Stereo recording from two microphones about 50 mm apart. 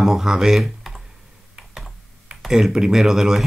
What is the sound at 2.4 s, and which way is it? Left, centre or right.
Speech, centre.